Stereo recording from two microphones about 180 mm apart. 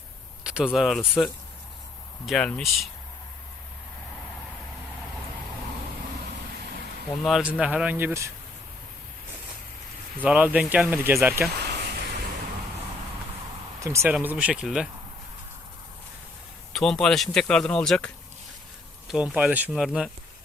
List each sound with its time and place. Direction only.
0.4 s speech: 5° right (ahead or behind)
7.2 s speech: centre (ahead or behind)
10.2 s speech: 10° right (ahead or behind)
11.6 s a sound: 65° right (ahead or behind)
13.8 s speech: 15° right (ahead or behind)
16.7 s speech: centre (ahead or behind)